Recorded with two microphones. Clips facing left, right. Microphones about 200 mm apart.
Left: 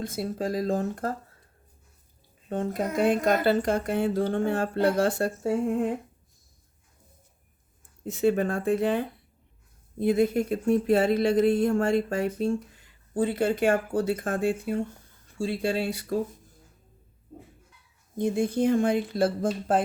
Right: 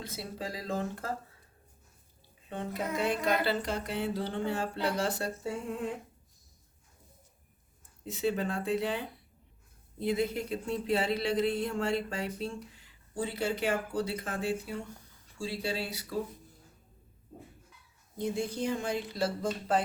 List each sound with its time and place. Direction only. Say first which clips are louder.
0.0 s speech: left 9 dB; 50° left (ahead or behind)
2.5 s speech: left 6 dB; 45° left (ahead or behind)
8.0 s speech: left 7 dB; 50° left (ahead or behind)
18.2 s speech: left 8 dB; 55° left (ahead or behind)